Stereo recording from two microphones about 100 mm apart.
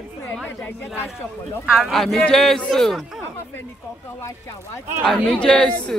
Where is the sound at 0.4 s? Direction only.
20° left (ahead or behind).